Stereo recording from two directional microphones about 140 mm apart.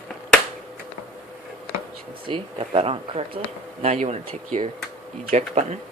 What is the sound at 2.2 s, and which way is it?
Speech, 40° right (ahead or behind).